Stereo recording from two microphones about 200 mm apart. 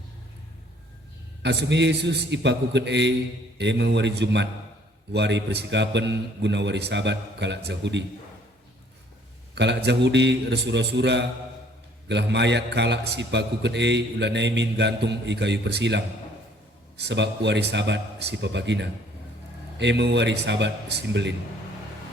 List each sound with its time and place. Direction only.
1.4 s a man's voice: 60° right (ahead or behind)
9.6 s a man's voice: 60° right (ahead or behind)